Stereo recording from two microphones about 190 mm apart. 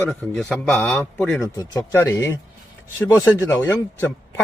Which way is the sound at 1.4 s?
15° left (ahead or behind).